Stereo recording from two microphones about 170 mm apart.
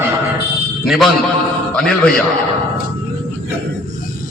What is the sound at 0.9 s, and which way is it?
Speech, centre (ahead or behind).